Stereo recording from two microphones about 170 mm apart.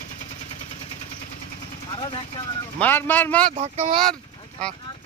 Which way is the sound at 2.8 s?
10° left (ahead or behind).